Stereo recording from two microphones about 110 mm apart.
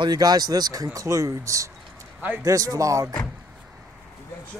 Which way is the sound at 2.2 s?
15° right (ahead or behind).